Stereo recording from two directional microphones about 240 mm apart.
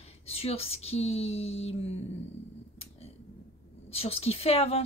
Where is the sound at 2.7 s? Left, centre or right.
Left.